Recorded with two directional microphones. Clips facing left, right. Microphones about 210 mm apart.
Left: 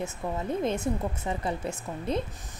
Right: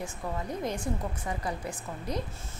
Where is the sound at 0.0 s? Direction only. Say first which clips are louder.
Left 3 dB; 25° left (ahead or behind).